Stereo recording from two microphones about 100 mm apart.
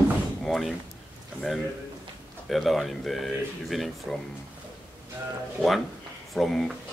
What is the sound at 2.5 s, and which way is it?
Speech, centre (ahead or behind).